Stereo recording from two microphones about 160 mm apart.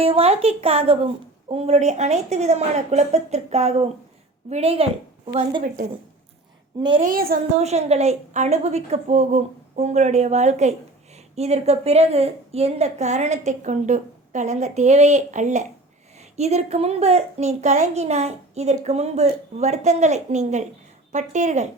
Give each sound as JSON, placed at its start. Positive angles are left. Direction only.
{"t": 0.0, "sound": "a woman's voice", "side_deg": -40}
{"t": 5.6, "sound": "a woman's voice", "side_deg": -50}
{"t": 7.0, "sound": "a woman's voice", "side_deg": -65}
{"t": 7.5, "sound": "a woman's voice", "side_deg": -45}